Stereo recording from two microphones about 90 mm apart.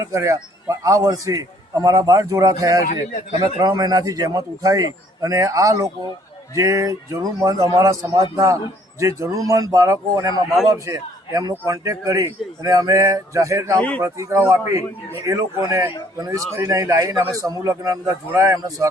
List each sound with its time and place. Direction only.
0.0 s a man's voice: 30° right (ahead or behind)
16.1 s a man's voice: 45° right (ahead or behind)
16.6 s a man's voice: 35° right (ahead or behind)